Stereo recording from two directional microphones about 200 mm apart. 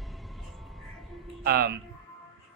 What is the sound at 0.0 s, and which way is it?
Music, centre (ahead or behind).